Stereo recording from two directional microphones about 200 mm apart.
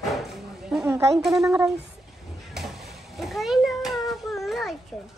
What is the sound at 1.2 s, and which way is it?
Speech, centre (ahead or behind).